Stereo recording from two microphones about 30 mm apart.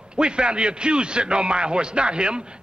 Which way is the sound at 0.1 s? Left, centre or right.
Right.